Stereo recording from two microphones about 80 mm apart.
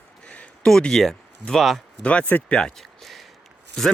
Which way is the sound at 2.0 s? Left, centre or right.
Centre.